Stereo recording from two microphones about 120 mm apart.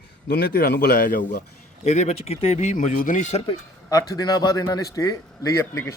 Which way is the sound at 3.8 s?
30° left (ahead or behind).